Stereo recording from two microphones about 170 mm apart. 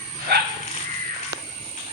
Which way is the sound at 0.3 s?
70° right (ahead or behind).